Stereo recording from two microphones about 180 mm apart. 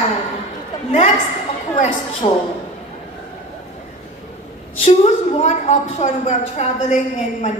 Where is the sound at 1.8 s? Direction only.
35° left (ahead or behind).